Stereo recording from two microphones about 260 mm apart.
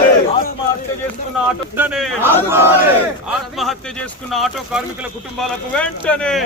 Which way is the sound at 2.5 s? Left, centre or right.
Centre.